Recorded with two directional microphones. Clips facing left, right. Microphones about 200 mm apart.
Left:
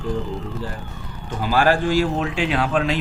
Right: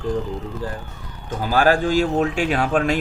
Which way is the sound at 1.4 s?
45° right (ahead or behind).